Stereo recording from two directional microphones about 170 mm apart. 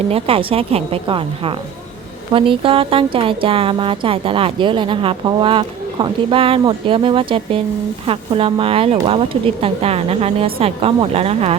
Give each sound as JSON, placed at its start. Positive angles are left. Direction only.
{"t": 0.1, "sound": "speech", "side_deg": -35}